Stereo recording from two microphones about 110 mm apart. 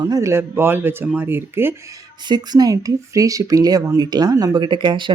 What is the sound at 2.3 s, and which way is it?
Speech, 40° right (ahead or behind).